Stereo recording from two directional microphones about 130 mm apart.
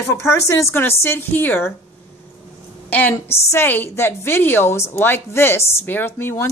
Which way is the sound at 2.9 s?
15° left (ahead or behind).